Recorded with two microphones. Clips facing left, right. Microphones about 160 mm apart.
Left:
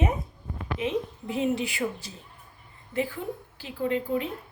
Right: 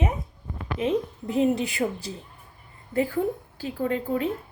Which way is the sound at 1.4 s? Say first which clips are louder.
Right 4 dB; 35° right (ahead or behind).